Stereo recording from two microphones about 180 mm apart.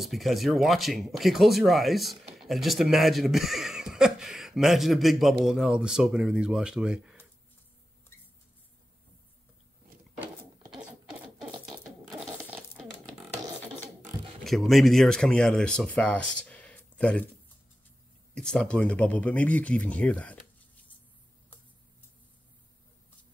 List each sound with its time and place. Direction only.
0.0 s speech: centre (ahead or behind)
14.4 s speech: centre (ahead or behind)
18.3 s speech: 5° left (ahead or behind)